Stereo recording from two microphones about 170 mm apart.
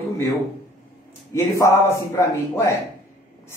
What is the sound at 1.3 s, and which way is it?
A man's voice, 20° left (ahead or behind).